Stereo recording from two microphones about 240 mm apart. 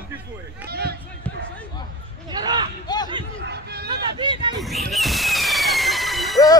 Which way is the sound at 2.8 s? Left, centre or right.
Centre.